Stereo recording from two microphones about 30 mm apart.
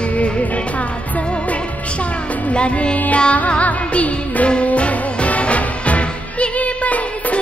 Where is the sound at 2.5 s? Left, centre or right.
Left.